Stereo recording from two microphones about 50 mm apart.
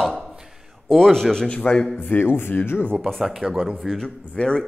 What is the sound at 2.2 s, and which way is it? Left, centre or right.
Speech, left.